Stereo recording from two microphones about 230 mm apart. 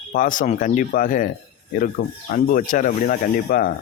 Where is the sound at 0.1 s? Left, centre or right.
Left.